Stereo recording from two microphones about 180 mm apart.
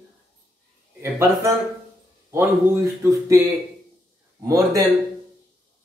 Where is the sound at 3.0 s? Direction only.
15° right (ahead or behind).